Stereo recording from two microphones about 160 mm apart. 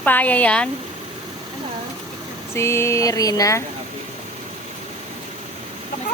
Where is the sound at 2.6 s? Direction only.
15° left (ahead or behind).